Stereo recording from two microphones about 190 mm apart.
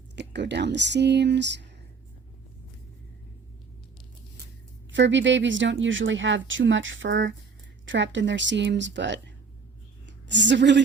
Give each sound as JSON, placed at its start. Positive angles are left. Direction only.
{"t": 0.2, "sound": "speech", "side_deg": -65}
{"t": 4.9, "sound": "a woman's voice", "side_deg": -70}